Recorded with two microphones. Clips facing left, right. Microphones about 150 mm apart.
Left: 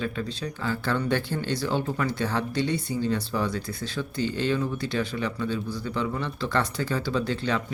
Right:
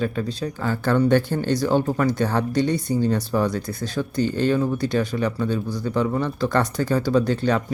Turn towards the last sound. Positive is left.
turn(degrees=-45)  # may be behind; listen again after turning